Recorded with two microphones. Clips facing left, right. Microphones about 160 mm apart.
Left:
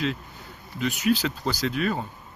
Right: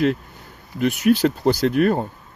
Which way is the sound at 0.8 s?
55° right (ahead or behind).